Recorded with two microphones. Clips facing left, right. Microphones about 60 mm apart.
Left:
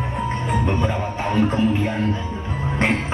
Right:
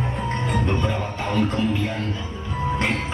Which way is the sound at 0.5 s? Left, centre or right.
Centre.